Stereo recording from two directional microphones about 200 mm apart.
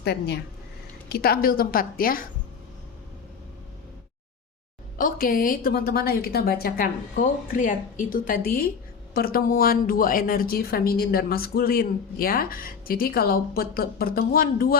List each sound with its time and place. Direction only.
0.0 s a woman's voice: 55° left (ahead or behind)
4.9 s a woman's voice: 45° left (ahead or behind)